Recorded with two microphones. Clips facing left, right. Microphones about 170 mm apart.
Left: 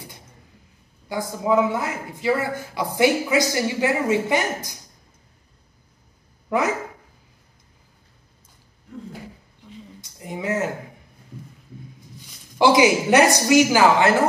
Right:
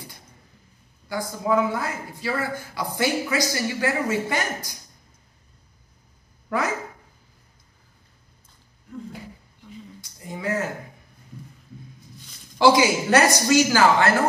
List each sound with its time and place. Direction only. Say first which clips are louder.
1.0 s a woman's voice: left 2 dB; 20° left (ahead or behind)
10.0 s a sound: left 2 dB; 20° left (ahead or behind)
12.5 s a woman's voice: left 2 dB; 20° left (ahead or behind)